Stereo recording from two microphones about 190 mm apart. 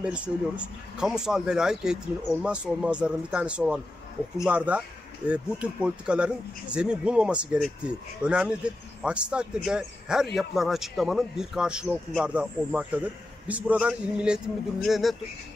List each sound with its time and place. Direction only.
0.0 s a man's voice: 5° right (ahead or behind)